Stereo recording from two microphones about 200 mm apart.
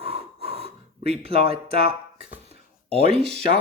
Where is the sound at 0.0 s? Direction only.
30° right (ahead or behind).